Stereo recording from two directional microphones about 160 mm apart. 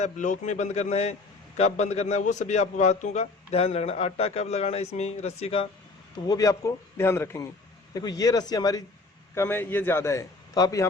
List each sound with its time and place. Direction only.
0.0 s a man's voice: 50° left (ahead or behind)
6.1 s a man's voice: 25° left (ahead or behind)